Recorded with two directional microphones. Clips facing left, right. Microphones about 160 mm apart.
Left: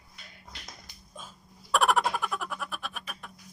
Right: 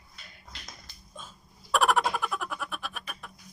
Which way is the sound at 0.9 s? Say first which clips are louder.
Left 1 dB; 15° left (ahead or behind).